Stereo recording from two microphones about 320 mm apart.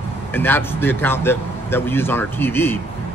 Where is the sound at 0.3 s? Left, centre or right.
Centre.